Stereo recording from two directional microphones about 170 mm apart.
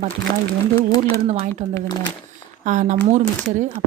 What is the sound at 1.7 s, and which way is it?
Speech, 25° left (ahead or behind).